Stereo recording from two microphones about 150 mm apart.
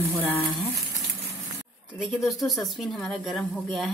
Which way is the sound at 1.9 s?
Centre (ahead or behind).